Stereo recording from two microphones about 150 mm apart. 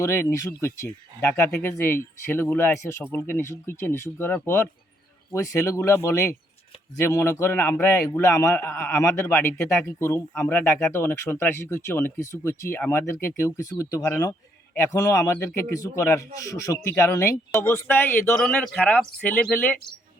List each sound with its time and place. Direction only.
0.0 s a man's voice: 20° left (ahead or behind)